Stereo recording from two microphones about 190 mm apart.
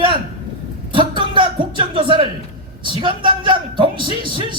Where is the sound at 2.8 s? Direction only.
25° right (ahead or behind).